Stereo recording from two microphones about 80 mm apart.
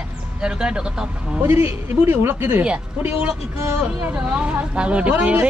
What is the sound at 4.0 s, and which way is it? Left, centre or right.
Speech, centre.